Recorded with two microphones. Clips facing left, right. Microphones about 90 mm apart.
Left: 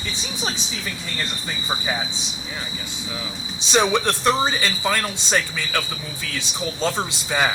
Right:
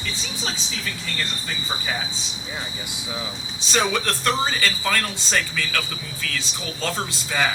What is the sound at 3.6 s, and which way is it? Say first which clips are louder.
Speech: left 4 dB; 20° left (ahead or behind).